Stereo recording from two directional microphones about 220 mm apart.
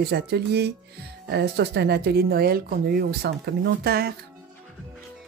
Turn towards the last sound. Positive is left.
turn(degrees=-45)  # may be behind; listen again after turning